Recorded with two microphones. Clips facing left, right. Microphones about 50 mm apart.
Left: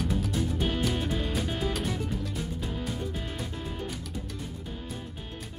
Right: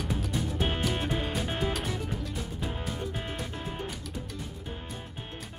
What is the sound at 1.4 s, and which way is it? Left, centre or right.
Music, right.